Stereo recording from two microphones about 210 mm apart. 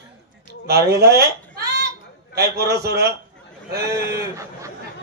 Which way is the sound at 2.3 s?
50° right (ahead or behind).